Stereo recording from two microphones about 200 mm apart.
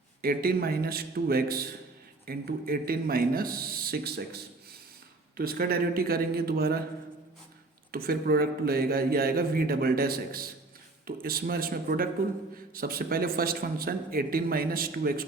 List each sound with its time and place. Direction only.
0.2 s speech: 50° right (ahead or behind)
5.4 s speech: 50° right (ahead or behind)
7.9 s speech: 50° right (ahead or behind)